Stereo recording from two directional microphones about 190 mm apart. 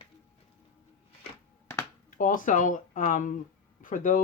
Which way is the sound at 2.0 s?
45° left (ahead or behind).